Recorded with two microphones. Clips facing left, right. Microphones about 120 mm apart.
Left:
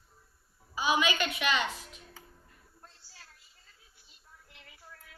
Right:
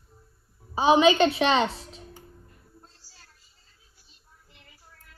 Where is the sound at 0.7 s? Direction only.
30° right (ahead or behind).